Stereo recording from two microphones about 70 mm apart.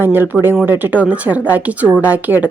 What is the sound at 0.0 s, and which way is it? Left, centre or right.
A woman's voice, right.